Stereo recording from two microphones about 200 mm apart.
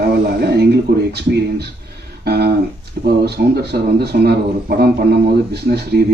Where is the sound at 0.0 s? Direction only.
50° right (ahead or behind).